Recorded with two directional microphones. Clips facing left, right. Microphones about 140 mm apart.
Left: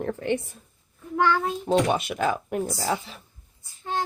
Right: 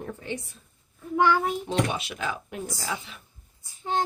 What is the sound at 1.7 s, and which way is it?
Speech, 50° left (ahead or behind).